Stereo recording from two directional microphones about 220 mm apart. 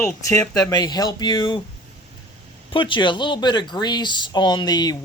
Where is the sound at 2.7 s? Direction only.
20° left (ahead or behind).